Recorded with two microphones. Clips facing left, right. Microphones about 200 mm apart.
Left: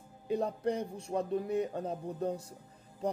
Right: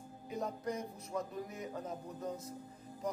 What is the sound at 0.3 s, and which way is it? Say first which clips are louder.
Speech: left 7 dB; 30° left (ahead or behind).